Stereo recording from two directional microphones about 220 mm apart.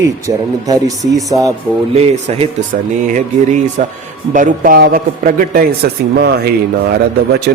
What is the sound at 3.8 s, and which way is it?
A man's voice, 35° right (ahead or behind).